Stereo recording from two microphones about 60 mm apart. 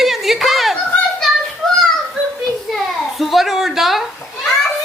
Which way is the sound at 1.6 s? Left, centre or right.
Centre.